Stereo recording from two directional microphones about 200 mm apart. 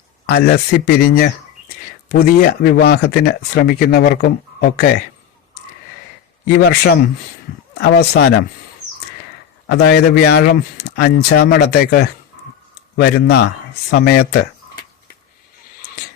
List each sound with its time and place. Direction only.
0.3 s speech: 50° left (ahead or behind)
6.6 s speech: 50° left (ahead or behind)
9.6 s speech: 55° left (ahead or behind)